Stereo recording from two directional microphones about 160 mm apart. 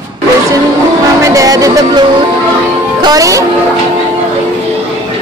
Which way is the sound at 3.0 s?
25° right (ahead or behind).